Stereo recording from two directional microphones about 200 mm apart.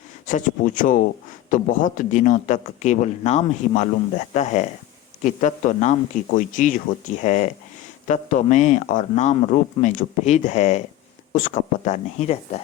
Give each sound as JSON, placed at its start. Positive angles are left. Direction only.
{"t": 0.3, "sound": "speech", "side_deg": 40}